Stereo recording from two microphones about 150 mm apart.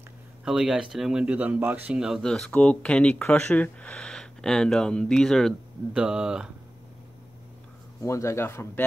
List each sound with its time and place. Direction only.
0.5 s speech: 5° right (ahead or behind)
8.0 s speech: 20° left (ahead or behind)